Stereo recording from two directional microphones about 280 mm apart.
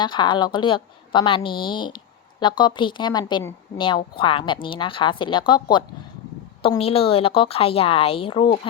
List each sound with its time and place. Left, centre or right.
0.0 s a woman's voice: centre